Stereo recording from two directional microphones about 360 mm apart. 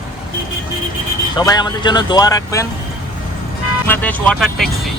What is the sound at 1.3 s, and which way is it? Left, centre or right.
Speech, centre.